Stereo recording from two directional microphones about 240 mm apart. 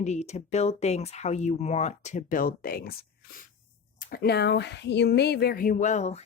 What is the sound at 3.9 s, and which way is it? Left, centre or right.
Speech, left.